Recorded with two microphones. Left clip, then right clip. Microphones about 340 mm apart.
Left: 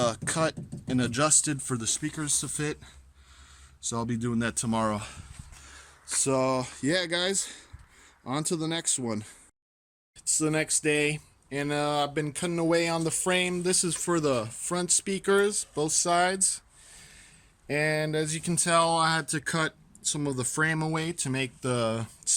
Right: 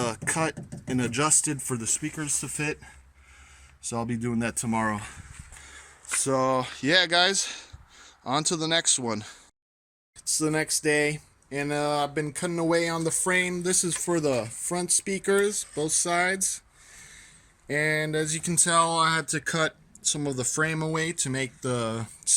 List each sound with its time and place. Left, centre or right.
0.0 s speech: centre
3.8 s speech: centre
17.7 s speech: centre